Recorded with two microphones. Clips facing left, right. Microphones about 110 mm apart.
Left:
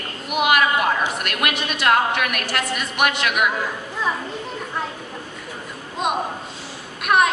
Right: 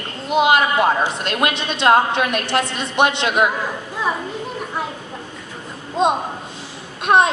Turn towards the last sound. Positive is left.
turn(degrees=-25)  # may be behind; listen again after turning